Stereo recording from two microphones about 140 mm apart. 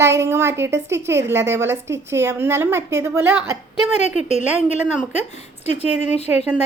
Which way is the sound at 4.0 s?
50° left (ahead or behind).